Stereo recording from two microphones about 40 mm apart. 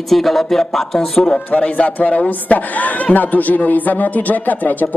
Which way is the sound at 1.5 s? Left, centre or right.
Left.